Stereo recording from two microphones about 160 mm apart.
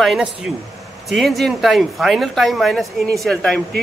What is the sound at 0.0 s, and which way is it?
Speech, centre (ahead or behind).